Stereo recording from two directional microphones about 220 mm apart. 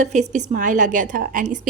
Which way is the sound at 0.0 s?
35° right (ahead or behind).